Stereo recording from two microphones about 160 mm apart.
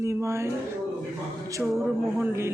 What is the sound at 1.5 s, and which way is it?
Speech, 15° right (ahead or behind).